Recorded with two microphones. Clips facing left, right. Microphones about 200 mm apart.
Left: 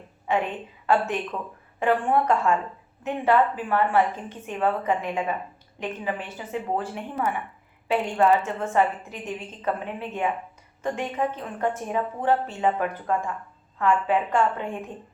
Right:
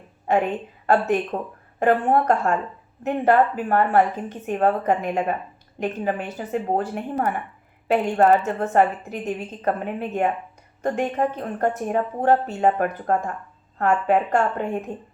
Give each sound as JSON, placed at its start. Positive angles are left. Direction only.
{"t": 0.3, "sound": "a woman's voice", "side_deg": -45}